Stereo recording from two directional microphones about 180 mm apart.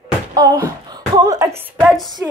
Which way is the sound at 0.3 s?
20° right (ahead or behind).